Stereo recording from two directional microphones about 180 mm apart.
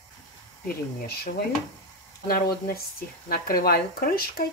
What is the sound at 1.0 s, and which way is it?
Speech, 60° left (ahead or behind).